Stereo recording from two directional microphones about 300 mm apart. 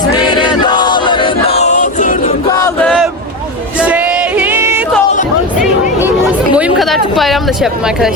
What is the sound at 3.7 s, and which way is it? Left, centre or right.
Male singing, centre.